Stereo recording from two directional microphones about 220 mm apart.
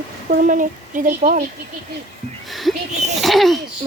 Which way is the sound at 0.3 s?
35° right (ahead or behind).